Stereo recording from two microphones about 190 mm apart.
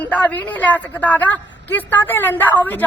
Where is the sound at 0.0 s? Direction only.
10° left (ahead or behind).